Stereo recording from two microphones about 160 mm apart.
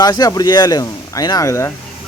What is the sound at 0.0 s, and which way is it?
Speech, 25° left (ahead or behind).